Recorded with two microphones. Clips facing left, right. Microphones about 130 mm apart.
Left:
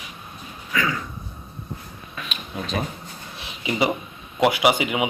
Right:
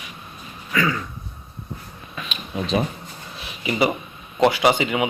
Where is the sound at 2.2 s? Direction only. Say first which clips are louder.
Right 3 dB; centre (ahead or behind).